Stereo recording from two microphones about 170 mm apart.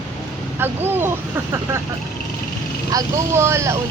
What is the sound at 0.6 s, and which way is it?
Speech, 15° right (ahead or behind).